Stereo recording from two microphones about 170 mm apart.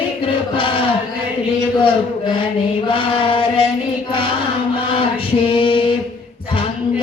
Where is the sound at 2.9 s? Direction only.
30° left (ahead or behind).